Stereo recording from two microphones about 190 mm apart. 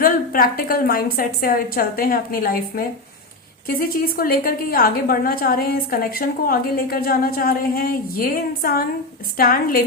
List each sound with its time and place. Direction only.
0.0 s a woman's voice: 50° left (ahead or behind)